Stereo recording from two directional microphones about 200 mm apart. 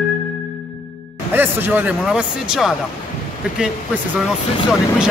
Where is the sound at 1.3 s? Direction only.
10° right (ahead or behind).